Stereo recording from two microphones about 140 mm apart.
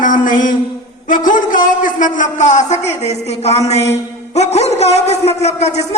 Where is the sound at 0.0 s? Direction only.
70° left (ahead or behind).